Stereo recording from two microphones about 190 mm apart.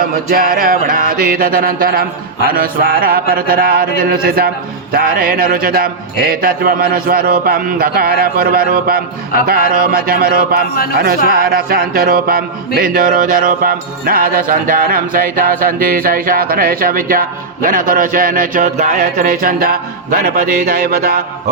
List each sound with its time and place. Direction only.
0.0 s speech: 50° right (ahead or behind)